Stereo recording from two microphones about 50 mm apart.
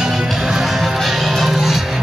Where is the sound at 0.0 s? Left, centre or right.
Centre.